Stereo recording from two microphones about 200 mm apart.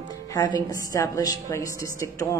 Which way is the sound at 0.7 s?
15° left (ahead or behind).